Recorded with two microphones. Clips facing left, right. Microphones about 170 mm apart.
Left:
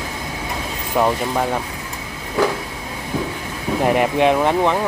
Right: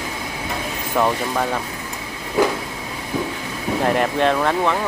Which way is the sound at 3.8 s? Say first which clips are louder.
Left 3 dB; 10° left (ahead or behind).